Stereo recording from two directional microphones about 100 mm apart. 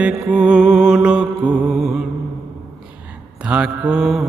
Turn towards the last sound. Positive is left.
turn(degrees=-5)  # may be behind; listen again after turning